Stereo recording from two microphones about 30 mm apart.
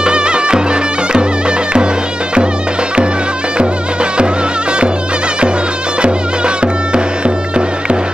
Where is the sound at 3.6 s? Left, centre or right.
Right.